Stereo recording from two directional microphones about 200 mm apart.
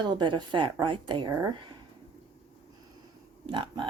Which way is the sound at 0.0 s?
25° right (ahead or behind).